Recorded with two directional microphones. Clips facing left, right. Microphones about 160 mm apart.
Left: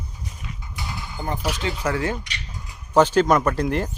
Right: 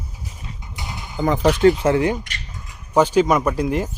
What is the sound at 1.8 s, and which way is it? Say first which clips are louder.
Speech: right 6 dB; 20° right (ahead or behind).